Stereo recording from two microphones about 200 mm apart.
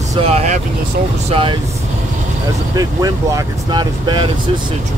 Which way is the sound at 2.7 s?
15° right (ahead or behind).